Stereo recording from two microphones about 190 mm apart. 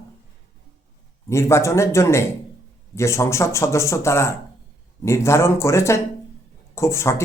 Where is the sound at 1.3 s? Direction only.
15° left (ahead or behind).